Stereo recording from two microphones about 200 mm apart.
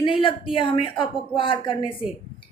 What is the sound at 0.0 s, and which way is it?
Speech, 25° left (ahead or behind).